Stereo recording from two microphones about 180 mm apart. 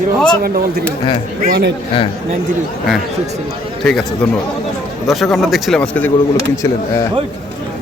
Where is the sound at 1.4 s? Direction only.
70° right (ahead or behind).